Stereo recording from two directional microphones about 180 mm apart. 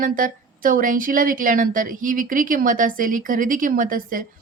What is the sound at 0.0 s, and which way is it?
Speech, 50° right (ahead or behind).